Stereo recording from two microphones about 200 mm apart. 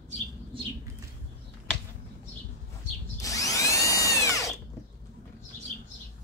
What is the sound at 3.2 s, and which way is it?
Drill, 15° left (ahead or behind).